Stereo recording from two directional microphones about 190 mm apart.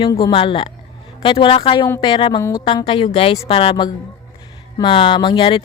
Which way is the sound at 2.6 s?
30° left (ahead or behind).